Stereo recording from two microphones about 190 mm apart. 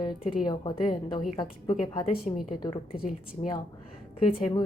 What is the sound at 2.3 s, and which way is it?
Speech, 35° left (ahead or behind).